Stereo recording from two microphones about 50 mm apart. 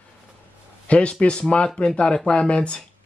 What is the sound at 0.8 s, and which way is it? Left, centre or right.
Speech, left.